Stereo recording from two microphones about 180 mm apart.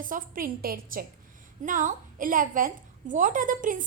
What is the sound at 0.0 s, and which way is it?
A woman's voice, 50° right (ahead or behind).